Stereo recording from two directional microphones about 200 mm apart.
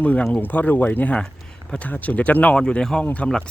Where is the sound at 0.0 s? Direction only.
5° left (ahead or behind).